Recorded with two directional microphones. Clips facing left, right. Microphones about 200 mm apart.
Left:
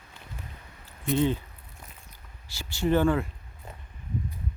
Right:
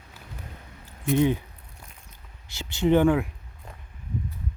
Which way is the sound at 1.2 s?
15° right (ahead or behind).